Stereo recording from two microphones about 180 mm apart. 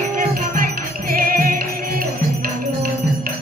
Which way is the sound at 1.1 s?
55° right (ahead or behind).